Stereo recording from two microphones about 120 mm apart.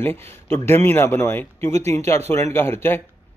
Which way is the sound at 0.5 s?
20° left (ahead or behind).